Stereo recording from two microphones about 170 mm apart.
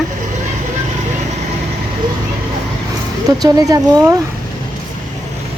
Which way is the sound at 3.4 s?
20° right (ahead or behind).